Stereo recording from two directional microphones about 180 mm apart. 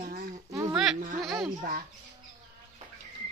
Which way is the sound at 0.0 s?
55° right (ahead or behind).